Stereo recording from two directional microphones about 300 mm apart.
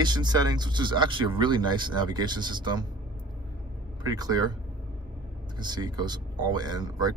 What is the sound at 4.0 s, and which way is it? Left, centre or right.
Speech, centre.